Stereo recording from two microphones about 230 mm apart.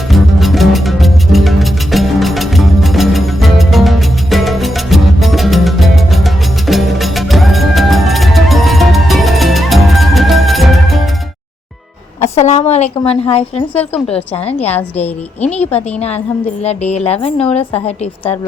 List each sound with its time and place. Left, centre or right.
0.1 s music: centre
12.2 s a sound: left
13.0 s a woman's voice: left